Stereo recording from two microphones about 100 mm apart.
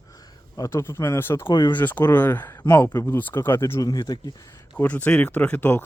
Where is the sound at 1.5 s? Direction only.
45° left (ahead or behind).